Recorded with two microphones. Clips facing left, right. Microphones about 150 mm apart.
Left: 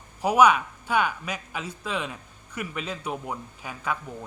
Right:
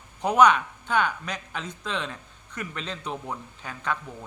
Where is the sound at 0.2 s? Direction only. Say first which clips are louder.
Even; 5° left (ahead or behind).